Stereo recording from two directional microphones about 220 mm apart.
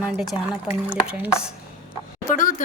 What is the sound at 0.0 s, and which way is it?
Speech, centre (ahead or behind).